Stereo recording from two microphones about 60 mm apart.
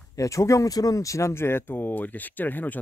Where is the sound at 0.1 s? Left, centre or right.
Left.